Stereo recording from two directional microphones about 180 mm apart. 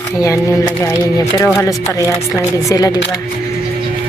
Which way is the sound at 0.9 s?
15° left (ahead or behind).